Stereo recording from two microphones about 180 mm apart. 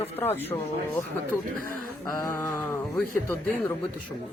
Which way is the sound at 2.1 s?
20° left (ahead or behind).